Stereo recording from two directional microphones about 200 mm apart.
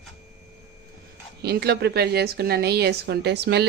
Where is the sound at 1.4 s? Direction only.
55° right (ahead or behind).